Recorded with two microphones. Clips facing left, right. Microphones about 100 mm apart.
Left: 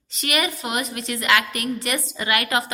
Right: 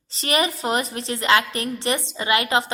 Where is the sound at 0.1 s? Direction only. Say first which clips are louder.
Right 2 dB; 30° right (ahead or behind).